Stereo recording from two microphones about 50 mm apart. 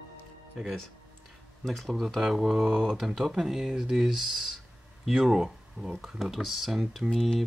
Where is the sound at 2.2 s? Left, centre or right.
Centre.